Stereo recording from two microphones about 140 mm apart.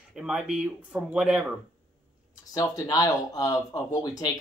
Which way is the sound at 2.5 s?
25° left (ahead or behind).